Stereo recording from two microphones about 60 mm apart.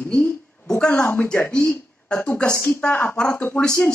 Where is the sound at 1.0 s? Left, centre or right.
Left.